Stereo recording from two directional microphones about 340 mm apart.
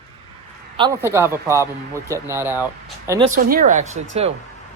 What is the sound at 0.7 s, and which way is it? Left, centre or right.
Speech, centre.